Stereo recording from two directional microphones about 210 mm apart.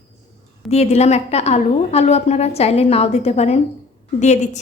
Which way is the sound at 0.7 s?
30° left (ahead or behind).